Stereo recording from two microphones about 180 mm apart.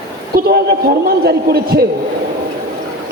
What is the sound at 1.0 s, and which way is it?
Speech, 60° right (ahead or behind).